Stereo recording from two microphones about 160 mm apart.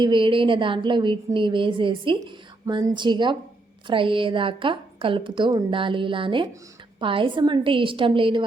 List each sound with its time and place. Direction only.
0.0 s a woman's voice: 30° right (ahead or behind)